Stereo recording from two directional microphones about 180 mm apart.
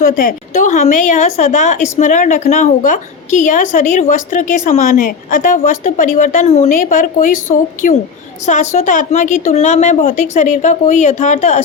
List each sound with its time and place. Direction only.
0.0 s a woman's voice: 50° left (ahead or behind)
6.7 s a woman's voice: 45° left (ahead or behind)